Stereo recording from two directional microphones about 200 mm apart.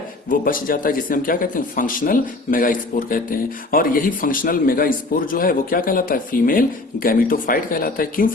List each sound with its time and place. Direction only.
0.3 s speech: 45° left (ahead or behind)